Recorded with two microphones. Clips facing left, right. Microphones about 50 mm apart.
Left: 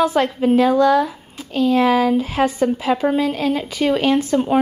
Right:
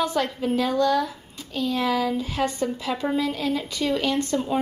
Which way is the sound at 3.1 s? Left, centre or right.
Left.